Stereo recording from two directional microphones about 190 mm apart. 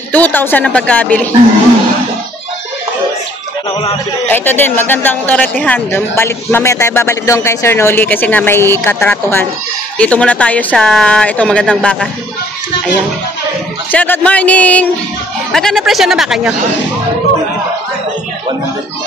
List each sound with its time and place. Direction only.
0.1 s speech: 10° left (ahead or behind)
4.3 s speech: 10° left (ahead or behind)
13.9 s speech: 10° left (ahead or behind)